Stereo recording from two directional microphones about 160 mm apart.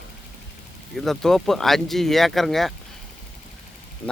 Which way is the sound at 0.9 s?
Centre (ahead or behind).